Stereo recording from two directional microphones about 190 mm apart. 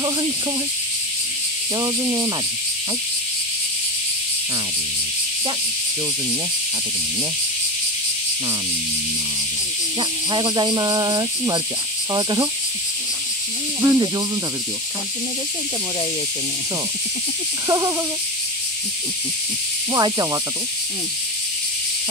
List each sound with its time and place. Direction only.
1.8 s speech: 20° right (ahead or behind)
9.9 s speech: 25° right (ahead or behind)
13.7 s speech: 15° right (ahead or behind)
17.6 s speech: 20° right (ahead or behind)
19.9 s speech: 20° right (ahead or behind)